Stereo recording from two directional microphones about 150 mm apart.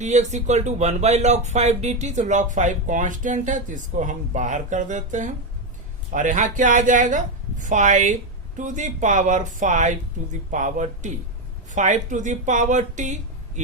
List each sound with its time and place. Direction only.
0.0 s speech: 50° right (ahead or behind)